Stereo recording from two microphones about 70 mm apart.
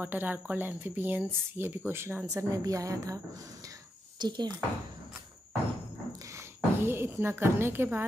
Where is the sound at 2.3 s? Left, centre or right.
Right.